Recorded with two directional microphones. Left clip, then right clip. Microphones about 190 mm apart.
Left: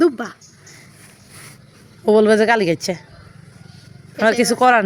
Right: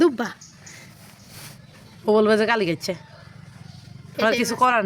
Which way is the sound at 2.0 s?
20° left (ahead or behind).